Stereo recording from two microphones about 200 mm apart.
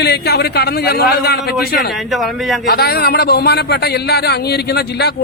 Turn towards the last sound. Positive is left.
turn(degrees=55)  # may be behind; listen again after turning